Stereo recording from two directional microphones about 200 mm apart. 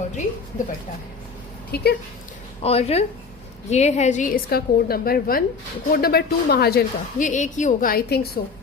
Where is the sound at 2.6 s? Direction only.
30° left (ahead or behind).